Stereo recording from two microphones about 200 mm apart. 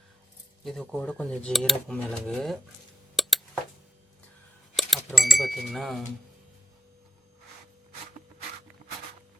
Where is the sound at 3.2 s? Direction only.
Centre (ahead or behind).